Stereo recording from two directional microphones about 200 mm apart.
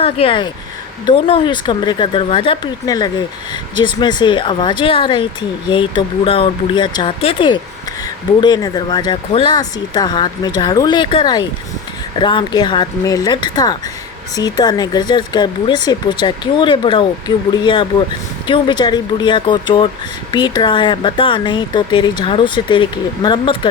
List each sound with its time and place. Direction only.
0.0 s speech: 25° left (ahead or behind)